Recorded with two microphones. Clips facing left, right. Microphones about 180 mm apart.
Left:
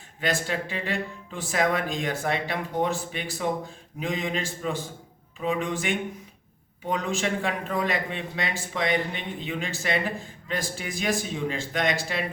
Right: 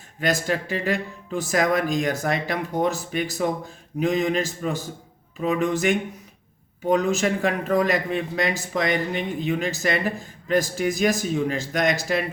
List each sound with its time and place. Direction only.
0.2 s speech: 45° right (ahead or behind)